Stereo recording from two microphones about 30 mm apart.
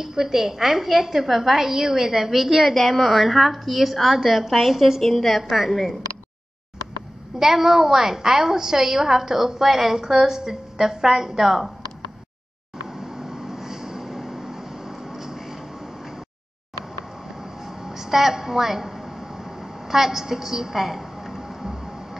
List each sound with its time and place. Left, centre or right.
0.0 s a woman's voice: centre
5.0 s a woman's voice: centre
7.3 s a woman's voice: centre
12.8 s vehicle: centre
17.6 s a sound: centre